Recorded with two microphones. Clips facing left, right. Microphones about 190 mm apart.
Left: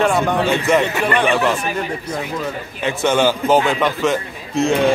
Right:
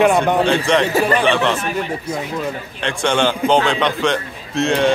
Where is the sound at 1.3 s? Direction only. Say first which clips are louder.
Even; 5° left (ahead or behind).